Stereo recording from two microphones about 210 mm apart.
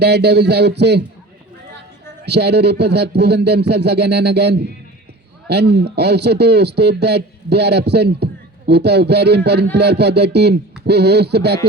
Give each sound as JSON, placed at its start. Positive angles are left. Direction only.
{"t": 0.0, "sound": "speech", "side_deg": -50}
{"t": 2.2, "sound": "speech", "side_deg": -50}